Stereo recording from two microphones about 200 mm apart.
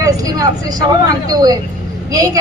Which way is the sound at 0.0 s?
15° right (ahead or behind).